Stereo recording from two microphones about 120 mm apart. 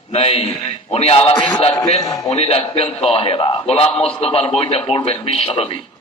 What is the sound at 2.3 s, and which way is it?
A man's voice, 55° left (ahead or behind).